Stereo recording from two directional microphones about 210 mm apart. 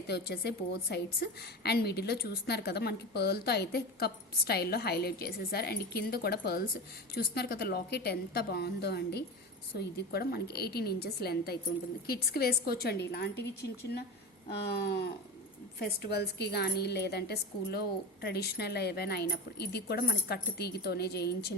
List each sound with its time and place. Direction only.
0.1 s a woman's voice: 50° left (ahead or behind)
14.7 s a woman's voice: 50° left (ahead or behind)